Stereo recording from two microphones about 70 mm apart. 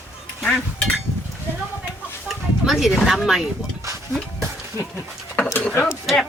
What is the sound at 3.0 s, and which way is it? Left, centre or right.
Speech, centre.